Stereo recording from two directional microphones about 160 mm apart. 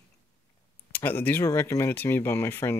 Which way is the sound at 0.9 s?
10° left (ahead or behind).